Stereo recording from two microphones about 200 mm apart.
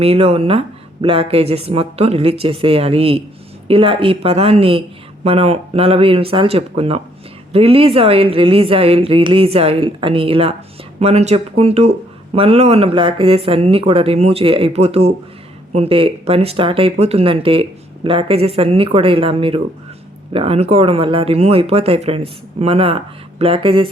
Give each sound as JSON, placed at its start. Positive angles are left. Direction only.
{"t": 0.0, "sound": "speech", "side_deg": -30}